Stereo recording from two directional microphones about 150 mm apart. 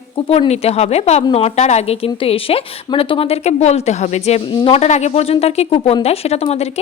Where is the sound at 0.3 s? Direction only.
45° left (ahead or behind).